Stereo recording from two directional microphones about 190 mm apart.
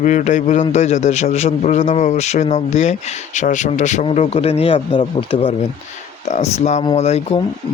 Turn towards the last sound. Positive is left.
turn(degrees=35)  # may be behind; listen again after turning